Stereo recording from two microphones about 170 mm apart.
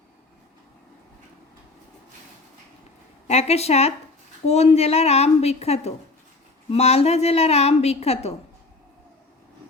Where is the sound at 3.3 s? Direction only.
40° left (ahead or behind).